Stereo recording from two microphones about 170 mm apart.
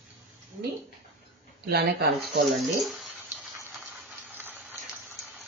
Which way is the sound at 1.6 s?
70° right (ahead or behind).